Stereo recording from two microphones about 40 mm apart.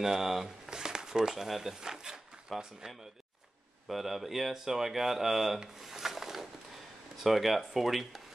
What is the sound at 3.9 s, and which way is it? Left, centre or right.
Speech, centre.